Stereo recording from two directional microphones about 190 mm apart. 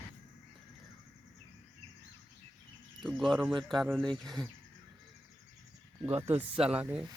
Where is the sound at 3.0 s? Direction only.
Centre (ahead or behind).